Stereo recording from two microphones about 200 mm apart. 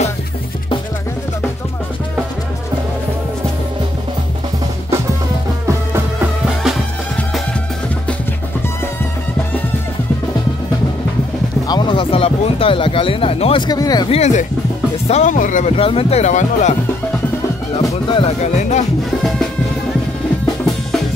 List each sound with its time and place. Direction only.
11.6 s speech: 20° left (ahead or behind); by 15.7 s 40° left (ahead or behind)
15.7 s speech: 25° left (ahead or behind)
17.8 s speech: 25° left (ahead or behind)